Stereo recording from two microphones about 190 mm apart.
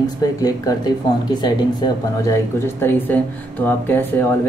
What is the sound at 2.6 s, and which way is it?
Speech, 10° left (ahead or behind).